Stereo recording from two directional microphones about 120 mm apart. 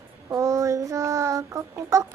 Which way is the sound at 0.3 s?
25° right (ahead or behind).